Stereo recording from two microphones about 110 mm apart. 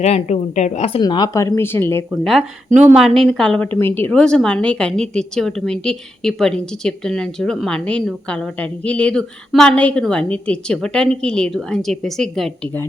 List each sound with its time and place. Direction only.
0.0 s a woman's voice: 85° left
1.0 s speech: 40° left (ahead or behind)
1.4 s speech: 25° left (ahead or behind)
3.0 s a woman's voice: 5° left (ahead or behind); by 4.1 s 20° left (ahead or behind)
4.1 s a woman's voice: 5° left (ahead or behind)